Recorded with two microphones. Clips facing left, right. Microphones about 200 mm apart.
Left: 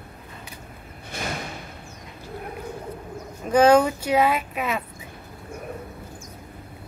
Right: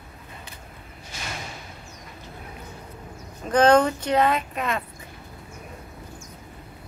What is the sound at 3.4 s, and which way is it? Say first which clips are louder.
Speech: left 1 dB; 10° left (ahead or behind).